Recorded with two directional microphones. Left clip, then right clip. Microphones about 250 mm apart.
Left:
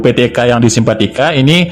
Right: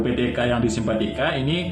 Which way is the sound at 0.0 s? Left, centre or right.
Left.